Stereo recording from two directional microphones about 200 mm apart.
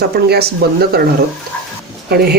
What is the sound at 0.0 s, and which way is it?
Speech, 50° right (ahead or behind).